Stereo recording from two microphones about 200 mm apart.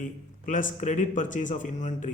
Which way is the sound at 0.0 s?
40° left (ahead or behind).